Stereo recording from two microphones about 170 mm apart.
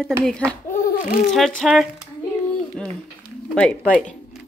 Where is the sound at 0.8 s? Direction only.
50° left (ahead or behind).